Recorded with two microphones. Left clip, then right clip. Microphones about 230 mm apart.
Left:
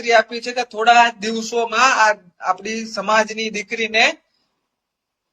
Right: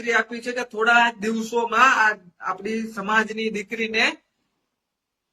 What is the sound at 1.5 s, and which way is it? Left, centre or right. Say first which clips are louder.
A man's voice: left 2 dB; centre.